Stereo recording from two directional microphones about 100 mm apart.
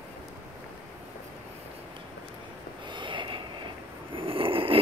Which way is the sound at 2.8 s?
55° right (ahead or behind).